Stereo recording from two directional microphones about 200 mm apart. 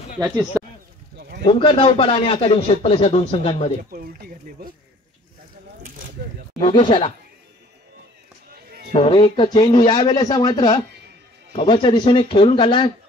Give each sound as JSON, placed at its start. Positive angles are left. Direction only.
{"t": 1.1, "sound": "a sound", "side_deg": -55}
{"t": 1.4, "sound": "speech", "side_deg": 25}
{"t": 3.9, "sound": "speech", "side_deg": -45}
{"t": 6.6, "sound": "speech", "side_deg": 25}
{"t": 8.9, "sound": "speech", "side_deg": 30}